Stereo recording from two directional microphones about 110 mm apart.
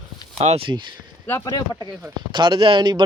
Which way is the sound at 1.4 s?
40° left (ahead or behind).